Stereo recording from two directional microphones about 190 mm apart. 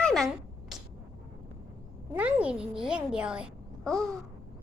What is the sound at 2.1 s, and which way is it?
A child's voice, 5° right (ahead or behind).